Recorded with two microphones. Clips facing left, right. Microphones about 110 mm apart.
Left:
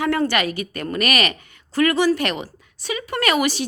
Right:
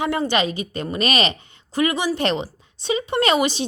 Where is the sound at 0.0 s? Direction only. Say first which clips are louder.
Left 1 dB; 20° right (ahead or behind).